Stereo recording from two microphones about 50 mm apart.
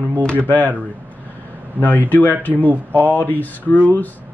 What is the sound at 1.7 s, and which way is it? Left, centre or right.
Speech, left.